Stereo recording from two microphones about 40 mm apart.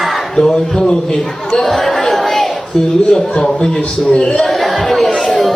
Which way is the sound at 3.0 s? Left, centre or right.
Centre.